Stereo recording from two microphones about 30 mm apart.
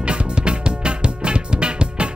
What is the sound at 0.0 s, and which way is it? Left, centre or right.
Music, right.